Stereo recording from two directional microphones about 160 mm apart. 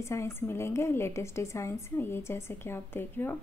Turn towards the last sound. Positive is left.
turn(degrees=15)  # may be behind; listen again after turning